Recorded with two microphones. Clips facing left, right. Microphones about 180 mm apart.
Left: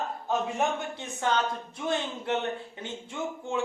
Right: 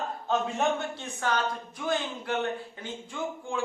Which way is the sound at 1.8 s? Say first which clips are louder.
Even; 25° left (ahead or behind).